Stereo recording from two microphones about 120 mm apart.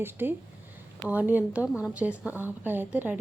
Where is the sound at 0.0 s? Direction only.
15° right (ahead or behind).